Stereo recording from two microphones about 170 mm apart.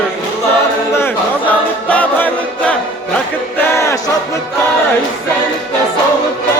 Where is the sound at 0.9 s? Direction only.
10° left (ahead or behind).